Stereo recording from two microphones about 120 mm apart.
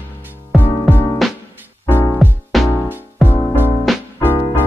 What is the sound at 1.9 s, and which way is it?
Music, 15° left (ahead or behind).